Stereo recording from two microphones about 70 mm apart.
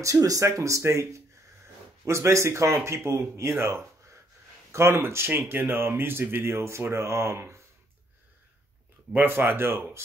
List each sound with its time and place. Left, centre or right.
0.0 s speech: right
9.1 s speech: right